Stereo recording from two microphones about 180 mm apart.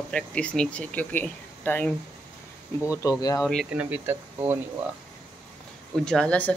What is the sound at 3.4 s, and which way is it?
Speech, 5° left (ahead or behind).